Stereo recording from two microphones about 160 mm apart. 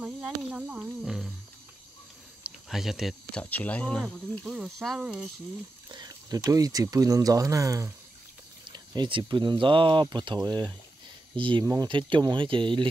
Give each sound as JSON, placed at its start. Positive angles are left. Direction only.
{"t": 0.0, "sound": "speech", "side_deg": -5}
{"t": 2.4, "sound": "speech", "side_deg": 0}
{"t": 3.4, "sound": "speech", "side_deg": 10}
{"t": 5.9, "sound": "speech", "side_deg": -25}
{"t": 11.6, "sound": "speech", "side_deg": -20}
{"t": 11.9, "sound": "speech", "side_deg": -30}